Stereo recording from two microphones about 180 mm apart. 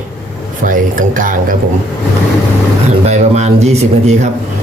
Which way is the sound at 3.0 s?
40° right (ahead or behind).